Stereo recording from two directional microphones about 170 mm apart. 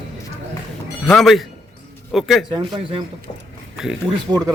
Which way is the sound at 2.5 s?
30° right (ahead or behind).